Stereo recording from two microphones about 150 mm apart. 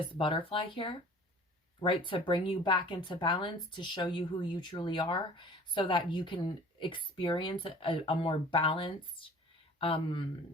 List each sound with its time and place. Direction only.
0.0 s speech: 35° left (ahead or behind)